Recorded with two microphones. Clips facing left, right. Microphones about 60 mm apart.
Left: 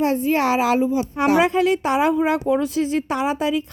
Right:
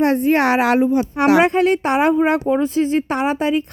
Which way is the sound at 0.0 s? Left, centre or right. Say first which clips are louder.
Right 4 dB; right.